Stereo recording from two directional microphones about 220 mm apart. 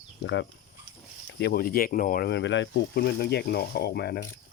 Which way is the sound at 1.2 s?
45° left (ahead or behind).